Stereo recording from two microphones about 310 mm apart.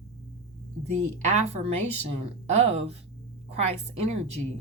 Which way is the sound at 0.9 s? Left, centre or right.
Right.